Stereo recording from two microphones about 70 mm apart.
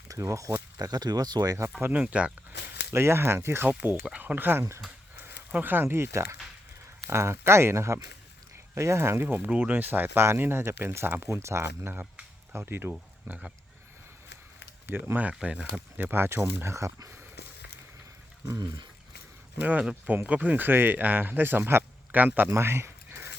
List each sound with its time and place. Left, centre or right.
0.1 s speech: right
0.8 s speech: right
1.9 s speech: centre
2.9 s speech: right
12.9 s speech: centre
14.8 s speech: right
18.5 s speech: right
19.5 s speech: right
22.4 s a sound: right